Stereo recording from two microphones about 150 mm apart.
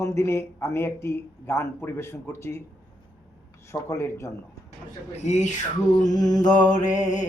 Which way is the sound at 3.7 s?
15° left (ahead or behind).